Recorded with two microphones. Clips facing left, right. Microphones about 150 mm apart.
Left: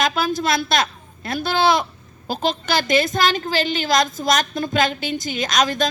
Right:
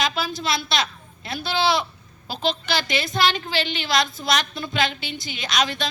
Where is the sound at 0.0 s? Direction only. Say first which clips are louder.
Left 5 dB; 50° left (ahead or behind).